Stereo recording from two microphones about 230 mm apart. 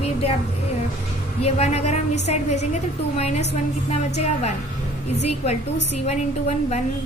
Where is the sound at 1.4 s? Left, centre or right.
Left.